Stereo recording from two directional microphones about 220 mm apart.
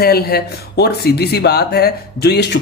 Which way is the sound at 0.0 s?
45° left (ahead or behind).